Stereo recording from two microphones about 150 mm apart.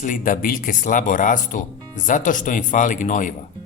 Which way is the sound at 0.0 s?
60° left (ahead or behind).